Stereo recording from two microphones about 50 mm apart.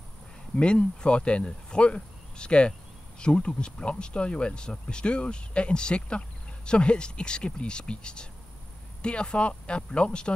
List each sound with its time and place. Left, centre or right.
0.6 s speech: left